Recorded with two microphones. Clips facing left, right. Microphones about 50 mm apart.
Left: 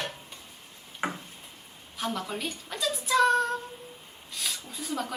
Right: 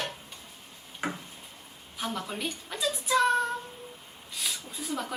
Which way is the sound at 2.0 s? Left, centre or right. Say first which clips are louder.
Left 1 dB; centre.